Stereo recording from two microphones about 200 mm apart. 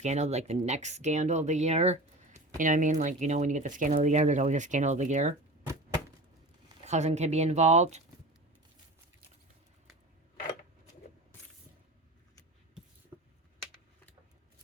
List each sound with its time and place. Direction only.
0.0 s speech: 35° right (ahead or behind)
6.8 s speech: 35° right (ahead or behind)
13.1 s a sound: 20° right (ahead or behind)